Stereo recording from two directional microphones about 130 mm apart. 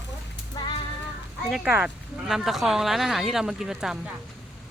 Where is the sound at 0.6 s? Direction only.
35° left (ahead or behind).